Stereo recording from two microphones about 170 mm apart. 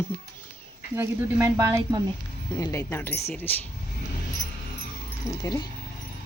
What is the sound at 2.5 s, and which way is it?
Speech, 20° left (ahead or behind).